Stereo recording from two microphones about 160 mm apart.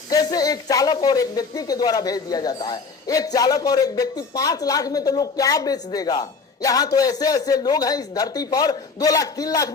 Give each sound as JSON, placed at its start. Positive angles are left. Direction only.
{"t": 0.1, "sound": "speech", "side_deg": 25}